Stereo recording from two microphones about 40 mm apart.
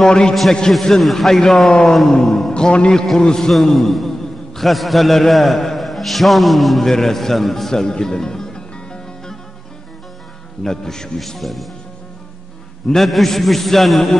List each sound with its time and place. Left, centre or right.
0.0 s a man's voice: centre
0.3 s a man's voice: centre
2.5 s a man's voice: left
3.7 s a man's voice: centre
10.6 s speech: centre
11.1 s a man's voice: centre
12.8 s a man's voice: centre